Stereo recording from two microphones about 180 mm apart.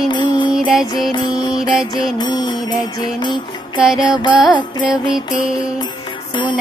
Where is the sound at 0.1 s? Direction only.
25° left (ahead or behind).